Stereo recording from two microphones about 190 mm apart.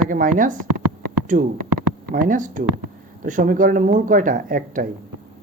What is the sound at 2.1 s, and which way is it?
Speech, 45° right (ahead or behind).